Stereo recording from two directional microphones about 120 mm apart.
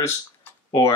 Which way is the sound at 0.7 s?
25° left (ahead or behind).